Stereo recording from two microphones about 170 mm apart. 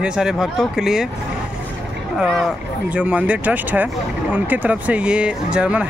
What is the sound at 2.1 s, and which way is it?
Speech, centre (ahead or behind).